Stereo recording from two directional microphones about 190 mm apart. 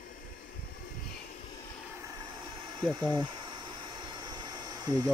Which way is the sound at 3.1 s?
20° right (ahead or behind).